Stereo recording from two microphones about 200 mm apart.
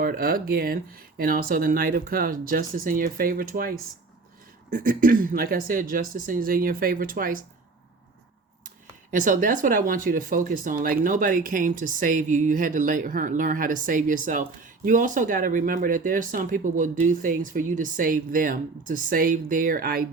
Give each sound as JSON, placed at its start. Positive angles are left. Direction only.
{"t": 0.0, "sound": "speech", "side_deg": -45}
{"t": 9.1, "sound": "speech", "side_deg": -40}